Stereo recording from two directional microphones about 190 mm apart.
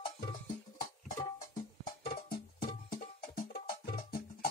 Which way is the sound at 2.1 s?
55° left (ahead or behind).